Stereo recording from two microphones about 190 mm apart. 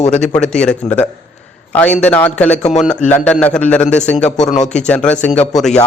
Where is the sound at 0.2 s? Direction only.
5° left (ahead or behind).